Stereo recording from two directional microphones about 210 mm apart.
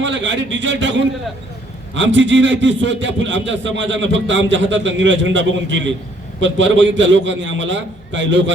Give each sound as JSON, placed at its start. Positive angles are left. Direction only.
{"t": 0.0, "sound": "a man's voice", "side_deg": -60}